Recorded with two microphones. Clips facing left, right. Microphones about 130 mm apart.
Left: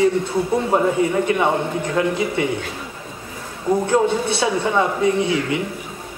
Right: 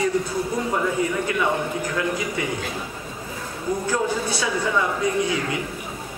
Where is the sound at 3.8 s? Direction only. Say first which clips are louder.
Left 5 dB; 25° left (ahead or behind).